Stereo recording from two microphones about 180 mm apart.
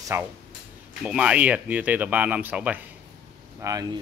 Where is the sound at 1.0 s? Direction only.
5° right (ahead or behind).